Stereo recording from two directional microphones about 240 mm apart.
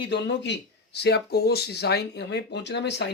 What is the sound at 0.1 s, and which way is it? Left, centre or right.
Speech, left.